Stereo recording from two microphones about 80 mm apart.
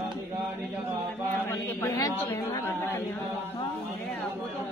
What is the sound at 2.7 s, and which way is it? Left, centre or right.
Speech, left.